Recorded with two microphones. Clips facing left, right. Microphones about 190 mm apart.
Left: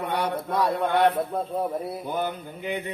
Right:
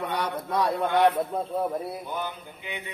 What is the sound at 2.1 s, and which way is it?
Mantra, 45° left (ahead or behind).